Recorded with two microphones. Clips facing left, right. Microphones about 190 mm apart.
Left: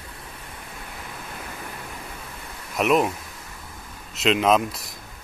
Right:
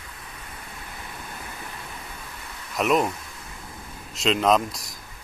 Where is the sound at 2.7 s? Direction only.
Centre (ahead or behind).